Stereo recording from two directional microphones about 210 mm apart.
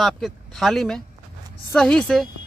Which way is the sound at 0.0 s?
Centre (ahead or behind).